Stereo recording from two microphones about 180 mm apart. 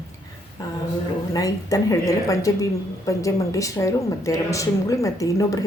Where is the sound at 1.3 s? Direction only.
20° left (ahead or behind).